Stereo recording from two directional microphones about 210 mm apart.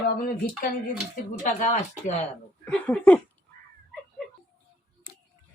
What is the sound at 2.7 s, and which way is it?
Speech, 5° left (ahead or behind).